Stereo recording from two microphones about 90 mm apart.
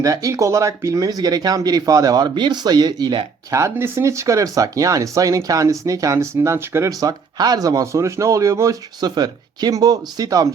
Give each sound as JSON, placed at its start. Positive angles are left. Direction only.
{"t": 0.0, "sound": "speech", "side_deg": -40}
{"t": 3.5, "sound": "speech", "side_deg": -30}
{"t": 7.1, "sound": "speech", "side_deg": -50}
{"t": 9.0, "sound": "speech", "side_deg": -50}